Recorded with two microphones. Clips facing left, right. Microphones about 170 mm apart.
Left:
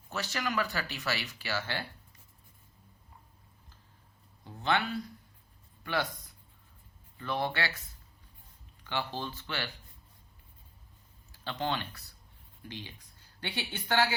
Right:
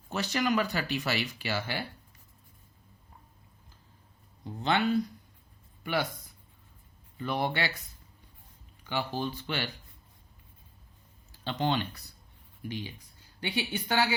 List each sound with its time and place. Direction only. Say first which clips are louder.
0.1 s speech: right 6 dB; 20° right (ahead or behind)
4.6 s speech: right 4 dB; 20° right (ahead or behind)
7.2 s speech: right 2 dB; 15° right (ahead or behind)
8.8 s speech: right 3 dB; 10° right (ahead or behind)
11.4 s speech: right 4 dB; 20° right (ahead or behind)